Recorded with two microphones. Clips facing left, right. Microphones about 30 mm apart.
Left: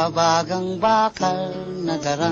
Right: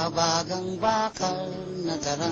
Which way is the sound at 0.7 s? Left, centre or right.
Left.